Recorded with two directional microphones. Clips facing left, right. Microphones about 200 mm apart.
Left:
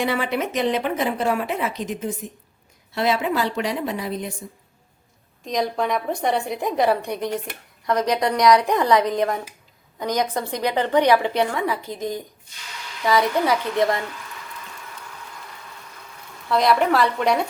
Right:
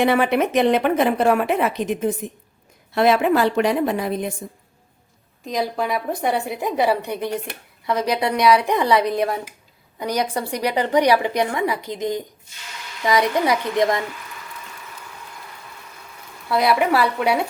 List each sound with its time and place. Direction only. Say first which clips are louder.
0.0 s a woman's voice: right 6 dB; 60° right (ahead or behind)
5.5 s a woman's voice: even; centre (ahead or behind)
16.5 s a woman's voice: even; 10° right (ahead or behind)